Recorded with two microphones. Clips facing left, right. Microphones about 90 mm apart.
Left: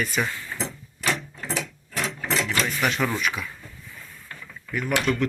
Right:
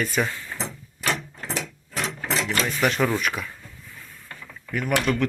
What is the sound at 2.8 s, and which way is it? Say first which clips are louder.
Speech: right 4 dB; 40° right (ahead or behind).